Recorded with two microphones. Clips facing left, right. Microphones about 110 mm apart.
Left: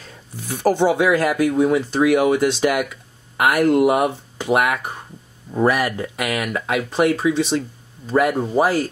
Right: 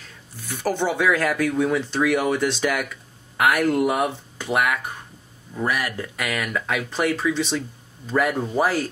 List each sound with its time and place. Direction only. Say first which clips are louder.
0.7 s speech: left 5 dB; 15° left (ahead or behind)
4.4 s speech: left 4 dB; 25° left (ahead or behind)
5.5 s speech: left 7 dB; 50° left (ahead or behind)
6.1 s speech: left 3 dB; 15° left (ahead or behind)